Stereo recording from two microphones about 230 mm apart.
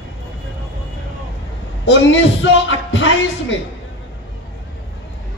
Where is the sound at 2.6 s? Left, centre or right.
Left.